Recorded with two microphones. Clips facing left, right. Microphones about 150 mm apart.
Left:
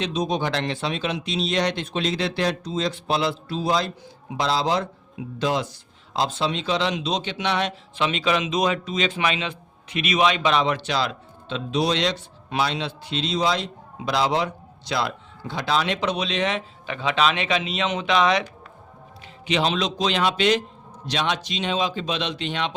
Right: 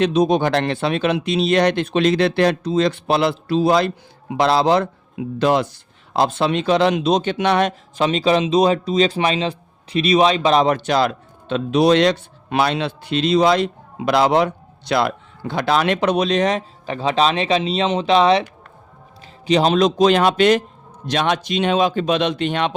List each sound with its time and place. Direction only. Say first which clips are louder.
0.0 s a man's voice: right 8 dB; 60° right (ahead or behind); by 18.4 s 30° right (ahead or behind)
19.5 s a man's voice: right 8 dB; 40° right (ahead or behind)